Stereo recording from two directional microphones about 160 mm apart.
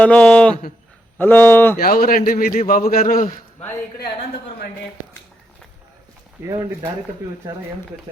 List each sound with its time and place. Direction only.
0.0 s speech: 5° left (ahead or behind)
1.8 s a man's voice: 65° left (ahead or behind)
6.4 s speech: 15° right (ahead or behind)